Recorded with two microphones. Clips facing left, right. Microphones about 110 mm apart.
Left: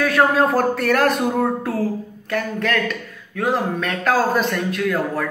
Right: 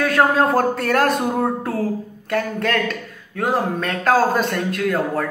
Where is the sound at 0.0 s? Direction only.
35° right (ahead or behind).